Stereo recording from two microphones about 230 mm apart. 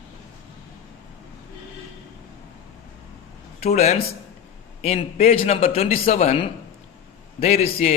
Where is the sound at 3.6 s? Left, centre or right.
Left.